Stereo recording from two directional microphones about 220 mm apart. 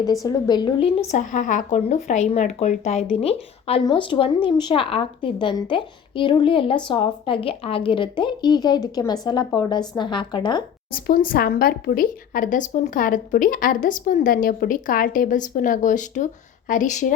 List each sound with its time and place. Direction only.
0.0 s a woman's voice: 15° left (ahead or behind)
10.9 s speech: 40° left (ahead or behind)